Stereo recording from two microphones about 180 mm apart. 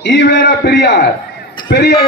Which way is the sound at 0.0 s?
75° left (ahead or behind).